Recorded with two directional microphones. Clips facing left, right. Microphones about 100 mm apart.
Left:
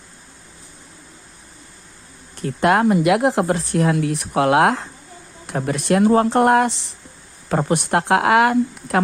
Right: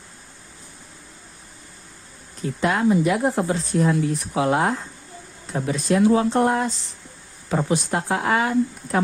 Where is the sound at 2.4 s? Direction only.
60° left (ahead or behind); by 4.8 s 85° left.